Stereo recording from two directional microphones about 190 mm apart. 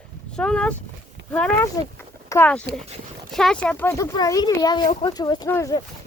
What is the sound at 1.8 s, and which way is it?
Speech, 20° left (ahead or behind).